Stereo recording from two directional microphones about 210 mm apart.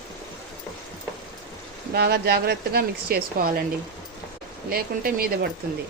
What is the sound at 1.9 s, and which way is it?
Speech, 50° right (ahead or behind).